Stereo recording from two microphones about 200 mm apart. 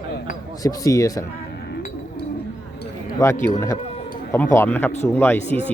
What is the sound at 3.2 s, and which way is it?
Speech, 20° left (ahead or behind).